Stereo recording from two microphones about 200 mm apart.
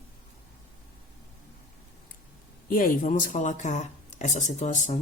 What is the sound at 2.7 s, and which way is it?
Speech, 45° left (ahead or behind).